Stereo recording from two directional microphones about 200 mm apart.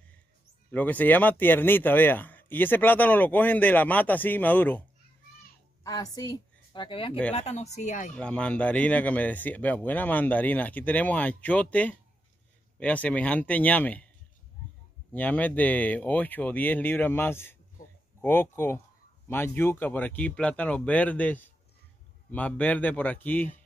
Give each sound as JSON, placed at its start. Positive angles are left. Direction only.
{"t": 0.7, "sound": "speech", "side_deg": 10}
{"t": 5.9, "sound": "a woman's voice", "side_deg": 20}
{"t": 8.1, "sound": "speech", "side_deg": 5}
{"t": 15.1, "sound": "speech", "side_deg": 10}